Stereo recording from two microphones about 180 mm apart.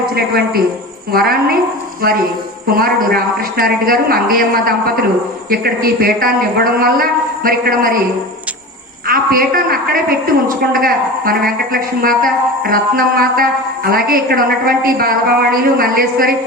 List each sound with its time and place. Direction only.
0.0 s a man's voice: 60° right (ahead or behind)
2.7 s a woman's voice: 55° right (ahead or behind)
9.0 s a woman's voice: 50° right (ahead or behind)